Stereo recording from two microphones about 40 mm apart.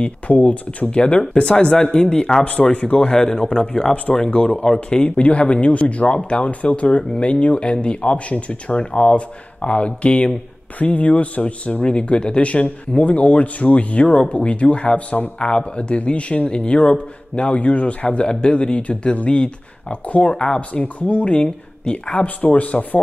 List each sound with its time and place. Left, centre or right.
0.3 s speech: left
2.4 s speech: left
3.2 s a man's voice: centre
3.9 s speech: left
7.0 s speech: left
15.3 s speech: left
18.2 s speech: left
20.3 s speech: centre
20.7 s speech: left